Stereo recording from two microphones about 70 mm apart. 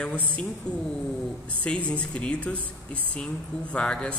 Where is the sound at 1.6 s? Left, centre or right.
Centre.